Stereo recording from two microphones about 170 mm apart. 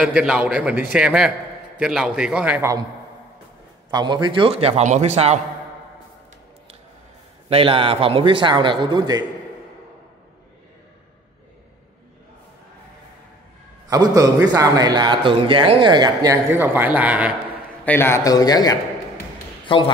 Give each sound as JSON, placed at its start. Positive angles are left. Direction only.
{"t": 0.0, "sound": "a man's voice", "side_deg": -5}
{"t": 3.9, "sound": "a man's voice", "side_deg": -25}
{"t": 7.4, "sound": "speech", "side_deg": -35}
{"t": 13.8, "sound": "a man's voice", "side_deg": -20}
{"t": 17.8, "sound": "a man's voice", "side_deg": 15}